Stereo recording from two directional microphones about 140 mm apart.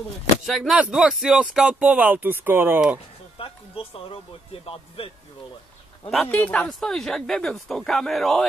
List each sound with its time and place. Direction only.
0.5 s speech: centre (ahead or behind)
3.3 s speech: 40° left (ahead or behind)
6.0 s speech: 10° left (ahead or behind)